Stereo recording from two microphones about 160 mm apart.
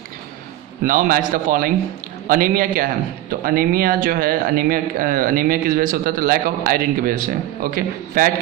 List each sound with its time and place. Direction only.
0.8 s a man's voice: 60° right (ahead or behind)